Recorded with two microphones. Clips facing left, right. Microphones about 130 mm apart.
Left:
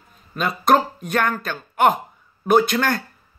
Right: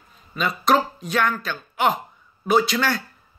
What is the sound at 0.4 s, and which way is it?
Speech, 50° left (ahead or behind).